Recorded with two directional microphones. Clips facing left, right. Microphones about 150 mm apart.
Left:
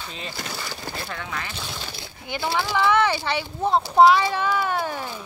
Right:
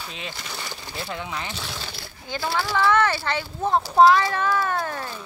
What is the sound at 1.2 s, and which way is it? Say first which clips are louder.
Speech: right 1 dB; 20° right (ahead or behind).